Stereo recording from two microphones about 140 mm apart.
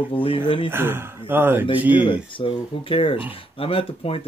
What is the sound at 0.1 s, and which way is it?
Speech, 40° left (ahead or behind).